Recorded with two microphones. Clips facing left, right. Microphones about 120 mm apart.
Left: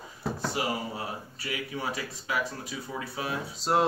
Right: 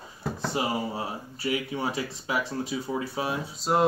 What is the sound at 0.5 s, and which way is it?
Speech, 25° right (ahead or behind).